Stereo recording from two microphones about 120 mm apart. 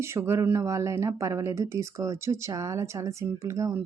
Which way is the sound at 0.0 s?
20° right (ahead or behind).